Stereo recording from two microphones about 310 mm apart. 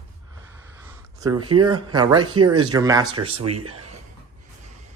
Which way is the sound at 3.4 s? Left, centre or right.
Right.